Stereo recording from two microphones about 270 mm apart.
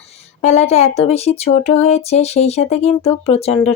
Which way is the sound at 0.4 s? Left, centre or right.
Left.